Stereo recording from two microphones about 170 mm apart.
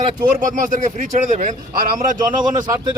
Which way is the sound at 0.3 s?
50° right (ahead or behind).